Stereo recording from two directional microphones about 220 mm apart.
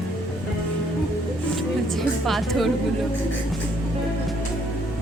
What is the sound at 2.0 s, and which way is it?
Speech, centre (ahead or behind).